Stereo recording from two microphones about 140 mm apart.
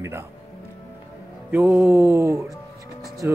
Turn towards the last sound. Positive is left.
turn(degrees=-15)  # may be behind; listen again after turning